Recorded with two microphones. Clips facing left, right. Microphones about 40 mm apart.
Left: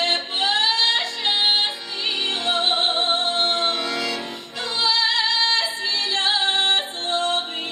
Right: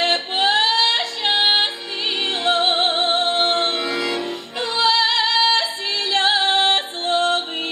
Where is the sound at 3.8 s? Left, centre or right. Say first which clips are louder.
Right 2 dB; centre.